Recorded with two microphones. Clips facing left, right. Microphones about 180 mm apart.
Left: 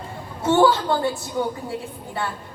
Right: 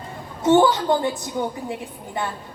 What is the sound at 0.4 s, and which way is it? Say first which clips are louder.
Speech: right 1 dB; 20° right (ahead or behind).